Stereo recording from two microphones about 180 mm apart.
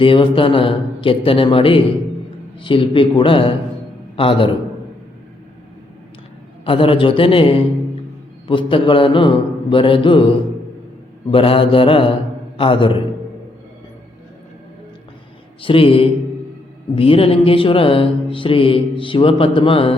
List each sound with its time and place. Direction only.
0.0 s speech: 30° left (ahead or behind)
6.7 s speech: 30° left (ahead or behind)
11.3 s mantra: 30° left (ahead or behind)
12.5 s a man's voice: 30° left (ahead or behind)
15.6 s speech: 30° left (ahead or behind)